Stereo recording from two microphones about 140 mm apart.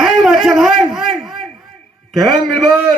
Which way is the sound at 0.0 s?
Centre (ahead or behind).